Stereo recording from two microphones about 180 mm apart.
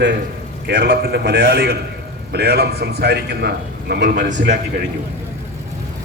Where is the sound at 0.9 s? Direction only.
60° right (ahead or behind).